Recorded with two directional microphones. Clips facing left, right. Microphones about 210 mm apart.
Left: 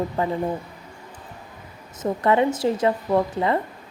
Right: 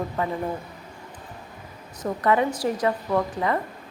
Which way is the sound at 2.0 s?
25° left (ahead or behind).